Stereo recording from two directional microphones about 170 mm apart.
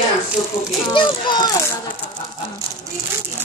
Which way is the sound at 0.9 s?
25° left (ahead or behind).